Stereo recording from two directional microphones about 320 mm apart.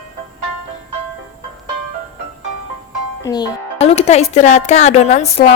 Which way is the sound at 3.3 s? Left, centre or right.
Centre.